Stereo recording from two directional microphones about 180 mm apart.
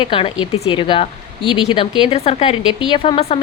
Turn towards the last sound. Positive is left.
turn(degrees=30)  # may be behind; listen again after turning